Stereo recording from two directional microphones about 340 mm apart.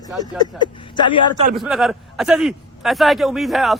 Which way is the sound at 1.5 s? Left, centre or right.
Centre.